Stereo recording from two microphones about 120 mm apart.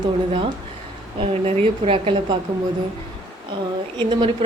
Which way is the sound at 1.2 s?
55° right (ahead or behind).